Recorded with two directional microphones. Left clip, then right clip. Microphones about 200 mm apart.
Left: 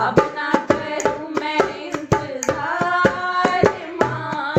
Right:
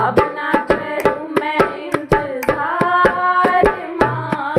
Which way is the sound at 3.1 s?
50° right (ahead or behind).